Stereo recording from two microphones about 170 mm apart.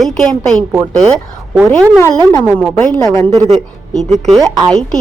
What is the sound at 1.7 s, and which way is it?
Speech, 5° left (ahead or behind).